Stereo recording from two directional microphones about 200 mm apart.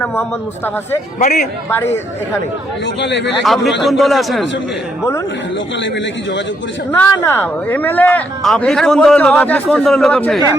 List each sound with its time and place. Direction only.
1.2 s a man's voice: 40° left (ahead or behind)
2.8 s a man's voice: 65° left (ahead or behind)
3.4 s speech: centre (ahead or behind)
6.9 s speech: 10° left (ahead or behind)